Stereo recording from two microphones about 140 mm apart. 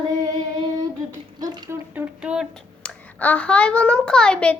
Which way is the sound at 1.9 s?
10° right (ahead or behind).